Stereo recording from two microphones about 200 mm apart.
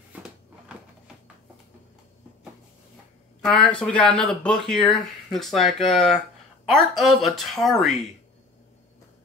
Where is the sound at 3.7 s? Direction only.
5° left (ahead or behind).